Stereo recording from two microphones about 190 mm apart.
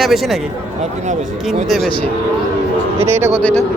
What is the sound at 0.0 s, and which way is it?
Speech, centre (ahead or behind).